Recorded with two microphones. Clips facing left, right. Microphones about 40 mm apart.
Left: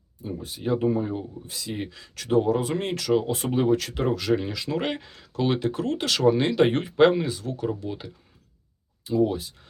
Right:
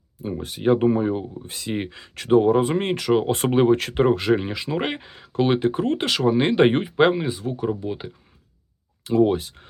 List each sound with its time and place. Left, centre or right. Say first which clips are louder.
0.3 s speech: right 7 dB; right
0.9 s speech: right 5 dB; right
3.2 s speech: right 5 dB; right
6.1 s speech: left 1 dB; centre
6.4 s speech: right 4 dB; right
6.8 s speech: even; centre
9.0 s speech: right 5 dB; right